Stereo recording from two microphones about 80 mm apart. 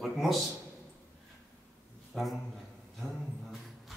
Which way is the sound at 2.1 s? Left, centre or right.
Centre.